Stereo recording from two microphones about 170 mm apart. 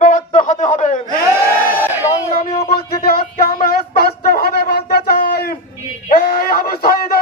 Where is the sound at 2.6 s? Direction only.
65° left (ahead or behind).